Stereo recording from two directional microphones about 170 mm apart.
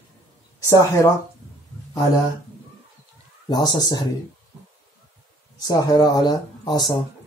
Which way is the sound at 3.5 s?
25° left (ahead or behind).